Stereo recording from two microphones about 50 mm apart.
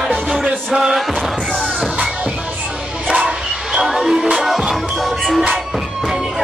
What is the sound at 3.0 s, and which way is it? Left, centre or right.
Music, centre.